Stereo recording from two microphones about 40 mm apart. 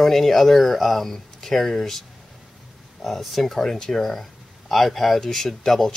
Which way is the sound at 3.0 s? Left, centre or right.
Centre.